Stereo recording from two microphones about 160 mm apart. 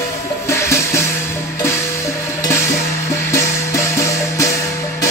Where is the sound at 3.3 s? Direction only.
20° left (ahead or behind).